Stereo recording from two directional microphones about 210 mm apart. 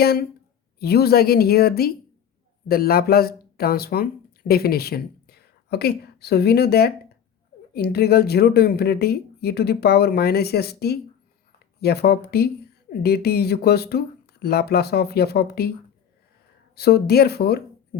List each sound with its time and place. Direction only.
0.0 s speech: 50° left (ahead or behind)
16.7 s speech: 50° left (ahead or behind)